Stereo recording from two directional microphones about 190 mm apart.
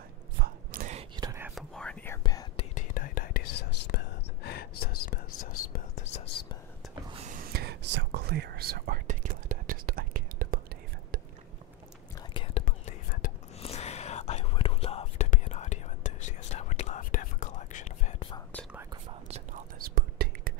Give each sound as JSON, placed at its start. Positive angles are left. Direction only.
{"t": 0.4, "sound": "a sound", "side_deg": -50}
{"t": 1.1, "sound": "whispering", "side_deg": -15}
{"t": 1.5, "sound": "whispering", "side_deg": 5}
{"t": 2.2, "sound": "whispering", "side_deg": 20}
{"t": 2.7, "sound": "whispering", "side_deg": 45}
{"t": 5.9, "sound": "whispering", "side_deg": 30}
{"t": 7.1, "sound": "whispering", "side_deg": -30}
{"t": 7.3, "sound": "whispering", "side_deg": -50}
{"t": 12.2, "sound": "whispering", "side_deg": 30}
{"t": 12.6, "sound": "whispering", "side_deg": 45}
{"t": 19.2, "sound": "whispering", "side_deg": -35}
{"t": 19.8, "sound": "whispering", "side_deg": -50}